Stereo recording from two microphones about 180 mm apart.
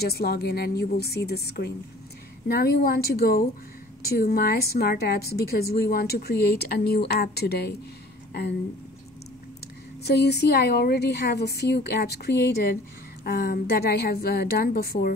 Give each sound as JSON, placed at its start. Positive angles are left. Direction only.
{"t": 0.0, "sound": "a woman's voice", "side_deg": 60}
{"t": 10.0, "sound": "a woman's voice", "side_deg": 65}